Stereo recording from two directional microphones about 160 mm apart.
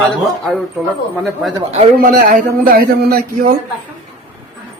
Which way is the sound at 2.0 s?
65° right (ahead or behind).